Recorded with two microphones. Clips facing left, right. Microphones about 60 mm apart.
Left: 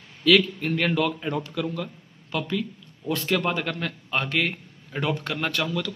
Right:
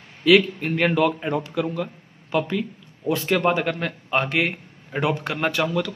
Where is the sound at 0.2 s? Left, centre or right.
Right.